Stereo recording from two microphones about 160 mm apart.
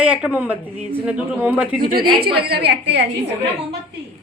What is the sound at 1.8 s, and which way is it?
Speech, 60° right (ahead or behind).